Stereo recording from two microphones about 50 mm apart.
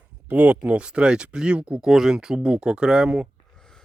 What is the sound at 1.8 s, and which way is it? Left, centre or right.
Speech, centre.